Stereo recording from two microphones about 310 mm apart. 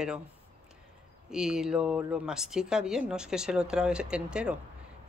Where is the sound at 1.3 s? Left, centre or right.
Centre.